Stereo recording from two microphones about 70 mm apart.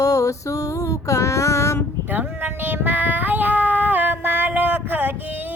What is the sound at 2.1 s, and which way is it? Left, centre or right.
Female singing, right.